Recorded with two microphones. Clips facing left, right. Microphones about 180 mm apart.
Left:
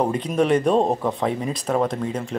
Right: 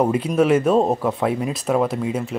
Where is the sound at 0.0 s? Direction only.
5° right (ahead or behind).